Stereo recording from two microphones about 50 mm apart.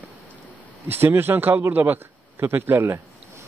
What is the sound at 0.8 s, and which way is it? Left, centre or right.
Speech, right.